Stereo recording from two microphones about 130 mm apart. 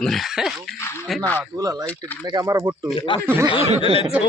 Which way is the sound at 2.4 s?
25° right (ahead or behind).